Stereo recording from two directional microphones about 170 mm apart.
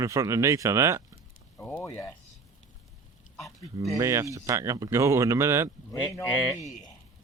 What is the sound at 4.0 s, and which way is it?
Speech, 15° right (ahead or behind).